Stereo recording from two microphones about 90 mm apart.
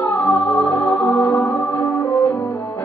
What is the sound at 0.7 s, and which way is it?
Music, 20° left (ahead or behind).